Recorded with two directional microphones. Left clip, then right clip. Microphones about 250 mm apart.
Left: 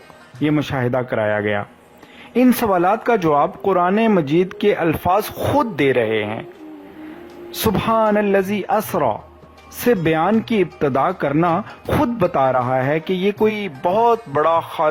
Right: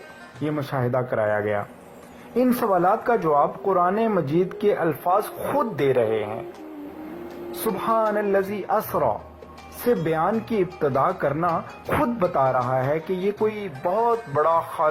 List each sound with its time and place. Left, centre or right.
0.4 s speech: left
7.9 s speech: left
12.3 s speech: left